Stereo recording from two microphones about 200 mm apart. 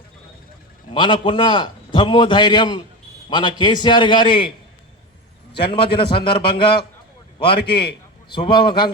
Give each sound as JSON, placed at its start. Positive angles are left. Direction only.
{"t": 0.9, "sound": "a man's voice", "side_deg": 25}
{"t": 5.5, "sound": "a man's voice", "side_deg": 25}